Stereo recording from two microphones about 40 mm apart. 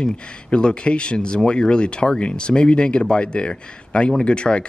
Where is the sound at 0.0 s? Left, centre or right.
Left.